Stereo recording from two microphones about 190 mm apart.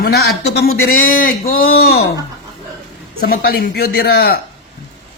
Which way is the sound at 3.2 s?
55° left (ahead or behind).